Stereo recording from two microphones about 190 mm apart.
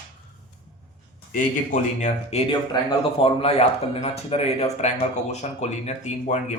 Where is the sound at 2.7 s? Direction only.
20° left (ahead or behind).